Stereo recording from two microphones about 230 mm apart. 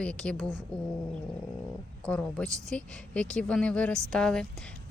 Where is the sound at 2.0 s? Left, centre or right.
Centre.